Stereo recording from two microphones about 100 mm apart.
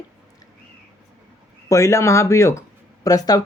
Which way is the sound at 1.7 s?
30° left (ahead or behind).